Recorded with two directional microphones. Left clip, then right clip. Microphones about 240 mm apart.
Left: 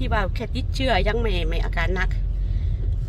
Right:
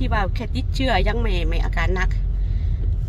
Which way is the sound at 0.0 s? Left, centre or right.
Centre.